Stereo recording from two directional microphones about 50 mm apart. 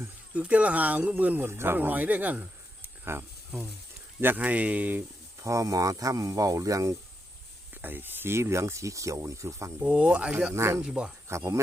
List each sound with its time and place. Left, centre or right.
0.3 s speech: right
1.5 s speech: right
1.9 s speech: right
3.0 s speech: right
4.4 s speech: right
5.4 s speech: right
7.7 s speech: right
9.8 s speech: right
10.5 s speech: right
10.8 s speech: centre
11.3 s speech: right